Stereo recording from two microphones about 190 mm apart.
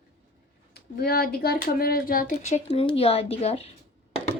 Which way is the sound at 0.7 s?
55° left (ahead or behind).